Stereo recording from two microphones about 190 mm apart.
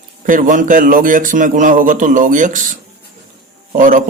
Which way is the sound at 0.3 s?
45° right (ahead or behind).